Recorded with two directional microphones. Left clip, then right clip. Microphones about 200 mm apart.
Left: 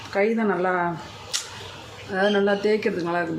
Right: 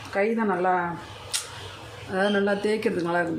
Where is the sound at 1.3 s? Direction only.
Centre (ahead or behind).